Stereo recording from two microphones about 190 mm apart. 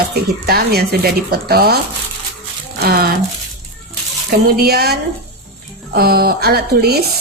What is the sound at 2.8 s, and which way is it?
Speech, 55° right (ahead or behind).